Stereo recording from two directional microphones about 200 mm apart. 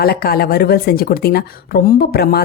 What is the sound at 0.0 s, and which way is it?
Speech, 50° left (ahead or behind).